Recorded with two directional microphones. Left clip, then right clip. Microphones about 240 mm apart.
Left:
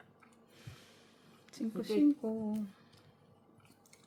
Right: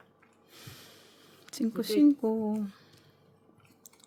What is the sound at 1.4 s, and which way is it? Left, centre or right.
Speech, right.